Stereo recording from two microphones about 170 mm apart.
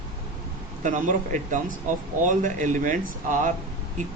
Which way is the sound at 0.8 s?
50° right (ahead or behind).